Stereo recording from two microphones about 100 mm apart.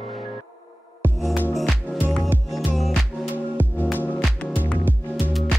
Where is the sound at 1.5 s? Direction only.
Centre (ahead or behind).